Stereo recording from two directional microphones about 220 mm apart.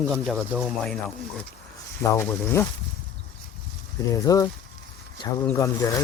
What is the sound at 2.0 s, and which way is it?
Speech, 10° left (ahead or behind).